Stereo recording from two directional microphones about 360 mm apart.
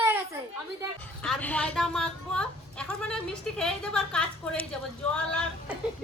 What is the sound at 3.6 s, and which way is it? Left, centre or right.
A woman's voice, centre.